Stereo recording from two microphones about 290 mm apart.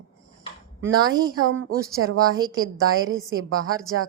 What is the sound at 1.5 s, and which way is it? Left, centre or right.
A woman's voice, right.